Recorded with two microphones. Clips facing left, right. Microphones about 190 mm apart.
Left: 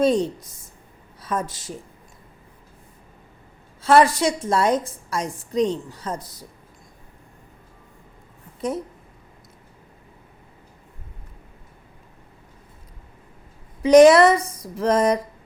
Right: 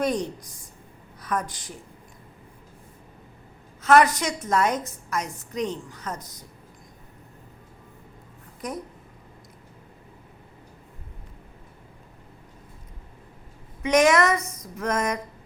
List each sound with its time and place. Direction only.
0.0 s a woman's voice: 25° left (ahead or behind)
3.8 s a woman's voice: 30° left (ahead or behind)
5.5 s a sound: 30° left (ahead or behind)
6.1 s speech: 10° left (ahead or behind)
8.6 s a woman's voice: 30° left (ahead or behind)
13.8 s a sound: 35° left (ahead or behind)